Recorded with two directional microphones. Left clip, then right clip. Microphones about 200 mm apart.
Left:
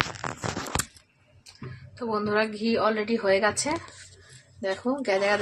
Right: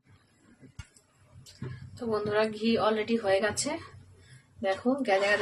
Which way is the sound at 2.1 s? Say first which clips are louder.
Left 2 dB; 15° left (ahead or behind).